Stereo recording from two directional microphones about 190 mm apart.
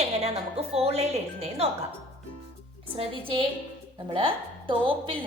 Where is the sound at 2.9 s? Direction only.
30° right (ahead or behind).